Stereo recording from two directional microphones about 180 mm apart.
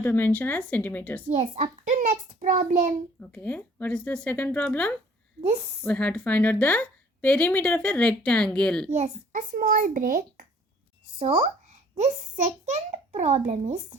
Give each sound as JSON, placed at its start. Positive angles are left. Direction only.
{"t": 0.0, "sound": "a woman's voice", "side_deg": 10}
{"t": 1.5, "sound": "a child's voice", "side_deg": -45}
{"t": 3.2, "sound": "a woman's voice", "side_deg": 10}
{"t": 5.4, "sound": "a child's voice", "side_deg": -35}
{"t": 5.8, "sound": "a woman's voice", "side_deg": 10}
{"t": 8.9, "sound": "a child's voice", "side_deg": -40}
{"t": 11.2, "sound": "a child's voice", "side_deg": -35}